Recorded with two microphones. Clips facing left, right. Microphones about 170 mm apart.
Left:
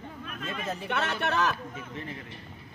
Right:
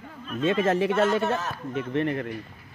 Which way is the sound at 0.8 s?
70° left (ahead or behind).